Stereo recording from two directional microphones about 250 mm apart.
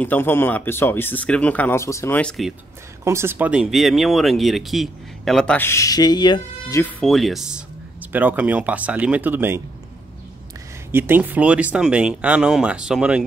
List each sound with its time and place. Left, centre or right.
0.0 s speech: centre
3.0 s speech: centre
10.9 s speech: centre